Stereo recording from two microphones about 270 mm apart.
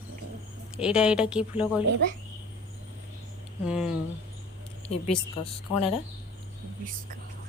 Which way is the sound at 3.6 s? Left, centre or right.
Centre.